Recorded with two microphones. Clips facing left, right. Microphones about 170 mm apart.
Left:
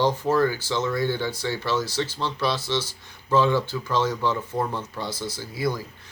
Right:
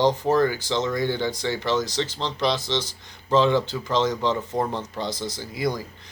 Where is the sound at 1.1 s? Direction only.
15° right (ahead or behind).